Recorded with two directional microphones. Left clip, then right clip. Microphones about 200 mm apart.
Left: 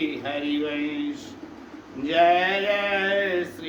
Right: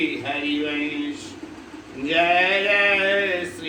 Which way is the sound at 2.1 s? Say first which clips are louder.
Right 1 dB; 15° left (ahead or behind).